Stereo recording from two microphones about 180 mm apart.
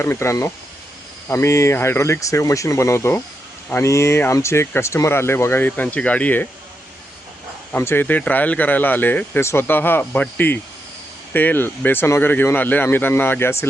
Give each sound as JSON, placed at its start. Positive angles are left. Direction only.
{"t": 0.0, "sound": "speech", "side_deg": 15}
{"t": 7.7, "sound": "speech", "side_deg": 15}